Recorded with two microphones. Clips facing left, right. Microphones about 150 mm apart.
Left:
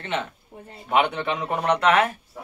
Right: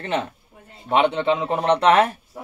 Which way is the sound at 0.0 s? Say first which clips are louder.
Right 4 dB; 35° right (ahead or behind).